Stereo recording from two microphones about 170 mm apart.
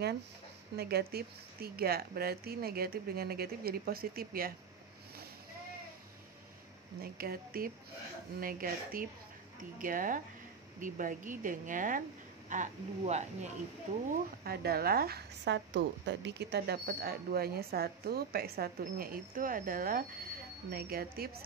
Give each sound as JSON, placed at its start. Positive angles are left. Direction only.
{"t": 0.7, "sound": "a woman's voice", "side_deg": -70}
{"t": 7.0, "sound": "a woman's voice", "side_deg": -60}
{"t": 14.4, "sound": "a woman's voice", "side_deg": -65}